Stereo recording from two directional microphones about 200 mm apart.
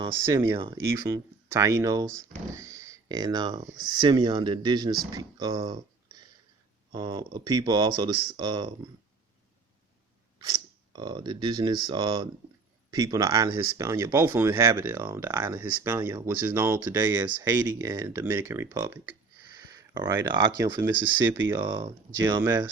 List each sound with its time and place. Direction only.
0.0 s speech: 15° right (ahead or behind)
10.3 s speech: 20° right (ahead or behind)